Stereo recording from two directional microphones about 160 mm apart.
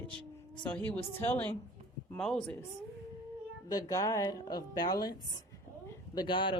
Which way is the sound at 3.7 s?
20° left (ahead or behind).